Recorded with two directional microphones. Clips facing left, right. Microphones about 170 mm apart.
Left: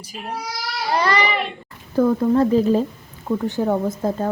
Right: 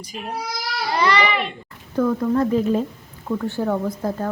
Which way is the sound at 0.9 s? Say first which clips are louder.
Even; 45° left (ahead or behind).